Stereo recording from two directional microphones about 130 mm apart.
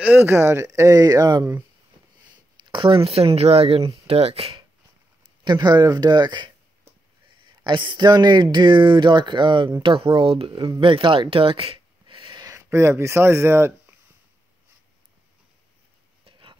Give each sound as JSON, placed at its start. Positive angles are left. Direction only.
{"t": 0.0, "sound": "speech", "side_deg": -15}
{"t": 2.5, "sound": "speech", "side_deg": -35}
{"t": 5.4, "sound": "speech", "side_deg": -35}
{"t": 7.6, "sound": "speech", "side_deg": -40}
{"t": 12.4, "sound": "speech", "side_deg": -20}
{"t": 16.3, "sound": "a sound", "side_deg": -40}